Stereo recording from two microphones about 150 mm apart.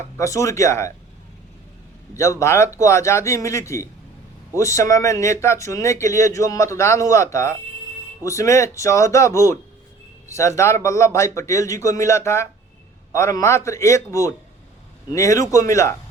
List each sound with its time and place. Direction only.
0.2 s speech: 20° left (ahead or behind)
2.1 s speech: 20° left (ahead or behind)